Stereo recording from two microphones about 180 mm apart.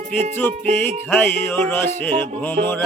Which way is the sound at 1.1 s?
10° left (ahead or behind).